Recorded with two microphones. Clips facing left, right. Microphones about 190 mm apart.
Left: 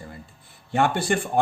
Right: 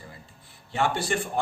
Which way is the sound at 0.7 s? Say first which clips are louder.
Left 4 dB; 55° left (ahead or behind).